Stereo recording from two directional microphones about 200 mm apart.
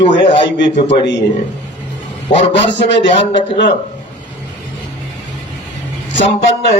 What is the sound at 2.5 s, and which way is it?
Speech, 60° left (ahead or behind).